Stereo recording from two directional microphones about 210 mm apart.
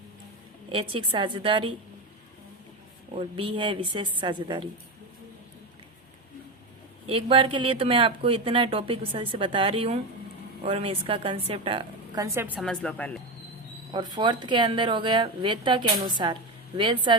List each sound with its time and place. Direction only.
0.7 s a woman's voice: 25° right (ahead or behind)
3.2 s a woman's voice: 25° right (ahead or behind)
7.1 s a woman's voice: 25° right (ahead or behind)
12.5 s speech: 5° left (ahead or behind)
13.9 s a woman's voice: 20° right (ahead or behind)